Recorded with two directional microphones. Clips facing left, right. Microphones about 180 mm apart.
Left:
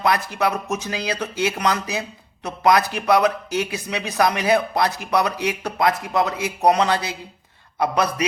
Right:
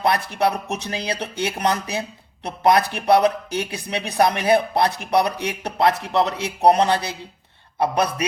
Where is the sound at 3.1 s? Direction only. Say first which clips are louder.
Right 2 dB; 30° right (ahead or behind).